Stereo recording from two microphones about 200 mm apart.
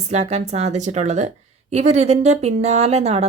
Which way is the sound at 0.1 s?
35° right (ahead or behind).